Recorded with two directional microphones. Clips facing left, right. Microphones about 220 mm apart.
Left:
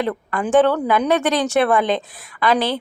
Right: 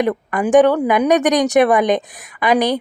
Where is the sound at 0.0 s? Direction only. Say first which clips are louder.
Right 4 dB; 15° right (ahead or behind).